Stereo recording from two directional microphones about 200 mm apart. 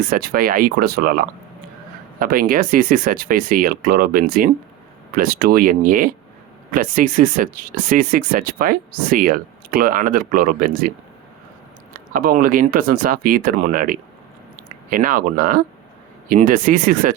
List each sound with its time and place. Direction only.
0.1 s speech: 45° right (ahead or behind)
2.1 s speech: 45° right (ahead or behind)
11.9 s speech: 45° right (ahead or behind)